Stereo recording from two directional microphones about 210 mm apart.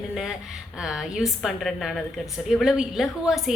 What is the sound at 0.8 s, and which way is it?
A woman's voice, centre (ahead or behind).